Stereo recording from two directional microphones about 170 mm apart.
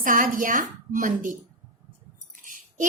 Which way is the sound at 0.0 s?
50° right (ahead or behind).